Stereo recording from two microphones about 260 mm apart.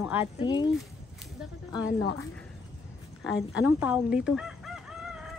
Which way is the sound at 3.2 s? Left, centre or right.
Centre.